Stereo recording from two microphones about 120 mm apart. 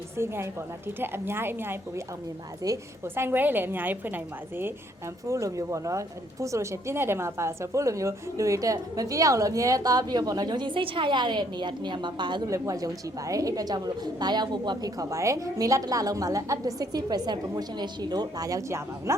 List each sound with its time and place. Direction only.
0.2 s a woman's voice: 20° right (ahead or behind)
5.3 s speech: 25° right (ahead or behind)
12.5 s a woman's voice: 25° right (ahead or behind)